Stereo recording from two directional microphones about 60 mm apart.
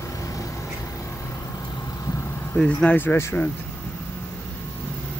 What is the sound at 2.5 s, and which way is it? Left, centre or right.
Speech, centre.